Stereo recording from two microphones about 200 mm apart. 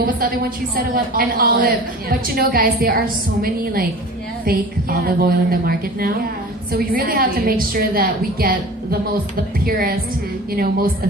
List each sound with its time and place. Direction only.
1.1 s a woman's voice: 45° right (ahead or behind)